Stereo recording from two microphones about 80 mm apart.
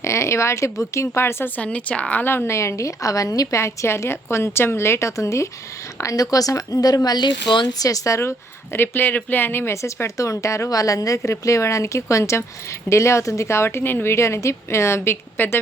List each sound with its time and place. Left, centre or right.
0.0 s a woman's voice: left
1.6 s a woman's voice: centre; by 7.3 s left
7.7 s a woman's voice: left
9.8 s a woman's voice: left